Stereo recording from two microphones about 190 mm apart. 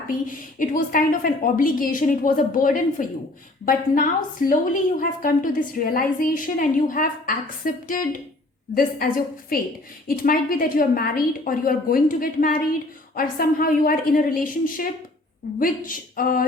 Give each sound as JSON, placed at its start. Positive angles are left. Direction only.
{"t": 0.1, "sound": "a woman's voice", "side_deg": 45}